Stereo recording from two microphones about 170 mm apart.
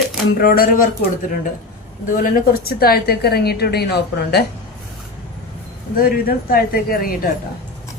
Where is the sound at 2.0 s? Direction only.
55° left (ahead or behind); by 4.4 s 70° left (ahead or behind).